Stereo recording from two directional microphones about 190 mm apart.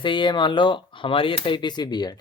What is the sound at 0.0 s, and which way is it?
Speech, 25° left (ahead or behind).